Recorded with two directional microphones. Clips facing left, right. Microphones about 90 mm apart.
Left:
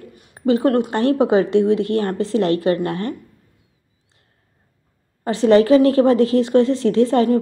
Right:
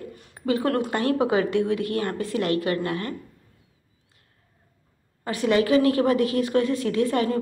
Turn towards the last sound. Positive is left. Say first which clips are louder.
# left 7 dB
turn(degrees=30)  # may be behind; listen again after turning